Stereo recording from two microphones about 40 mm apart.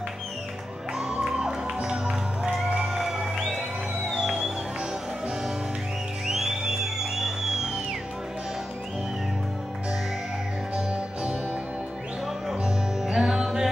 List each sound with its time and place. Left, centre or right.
0.9 s music: centre
2.9 s music: centre
6.2 s music: centre
12.6 s music: centre